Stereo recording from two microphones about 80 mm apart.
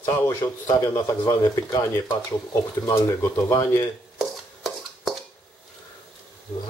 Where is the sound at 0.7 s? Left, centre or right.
Left.